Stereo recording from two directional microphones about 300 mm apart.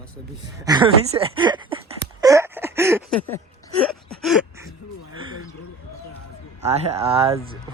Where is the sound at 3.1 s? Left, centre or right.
Centre.